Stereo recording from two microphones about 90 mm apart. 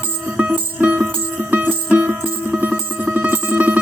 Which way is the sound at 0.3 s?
20° right (ahead or behind).